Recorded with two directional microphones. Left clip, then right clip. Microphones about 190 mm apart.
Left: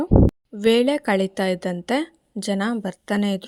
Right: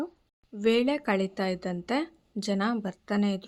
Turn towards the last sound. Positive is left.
turn(degrees=40)  # may be behind; listen again after turning